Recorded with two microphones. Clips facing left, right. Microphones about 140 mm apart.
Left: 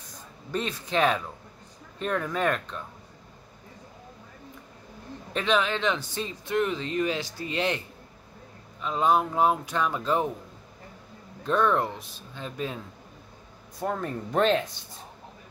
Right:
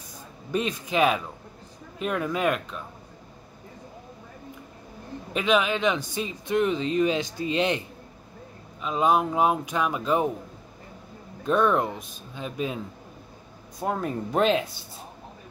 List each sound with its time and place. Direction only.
0.5 s speech: 15° right (ahead or behind)
5.3 s speech: 10° right (ahead or behind)
8.8 s speech: 15° right (ahead or behind)
11.4 s speech: 15° right (ahead or behind)